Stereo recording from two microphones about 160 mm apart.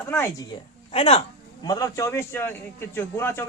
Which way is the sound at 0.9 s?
35° left (ahead or behind).